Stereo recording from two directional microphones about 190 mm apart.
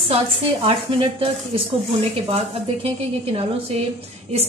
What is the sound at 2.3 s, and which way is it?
A woman's voice, 30° right (ahead or behind).